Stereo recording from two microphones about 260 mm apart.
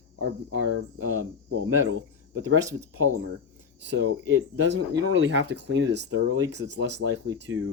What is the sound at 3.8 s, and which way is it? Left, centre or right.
Speech, right.